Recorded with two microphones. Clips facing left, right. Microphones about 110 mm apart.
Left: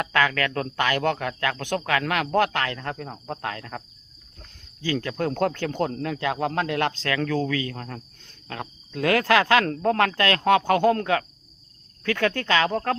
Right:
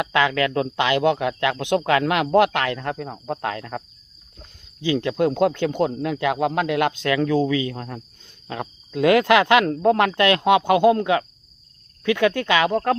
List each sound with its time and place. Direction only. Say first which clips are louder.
0.0 s speech: right 3 dB; 20° right (ahead or behind)